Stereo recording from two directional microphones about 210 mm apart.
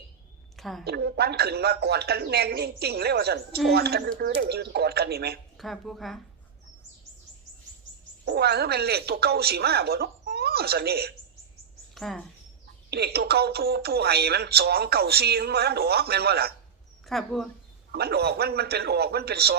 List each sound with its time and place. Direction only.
0.5 s a woman's voice: centre (ahead or behind)
0.9 s speech: 50° right (ahead or behind)
5.5 s a woman's voice: centre (ahead or behind)
8.2 s speech: 50° right (ahead or behind)
11.9 s speech: centre (ahead or behind)
12.9 s speech: 50° right (ahead or behind)
17.1 s a woman's voice: centre (ahead or behind)
17.9 s speech: 50° right (ahead or behind)